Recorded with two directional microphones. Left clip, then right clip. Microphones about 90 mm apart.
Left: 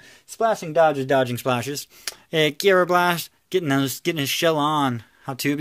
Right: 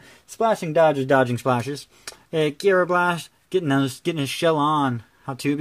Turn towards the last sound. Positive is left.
turn(degrees=0)  # may be behind; listen again after turning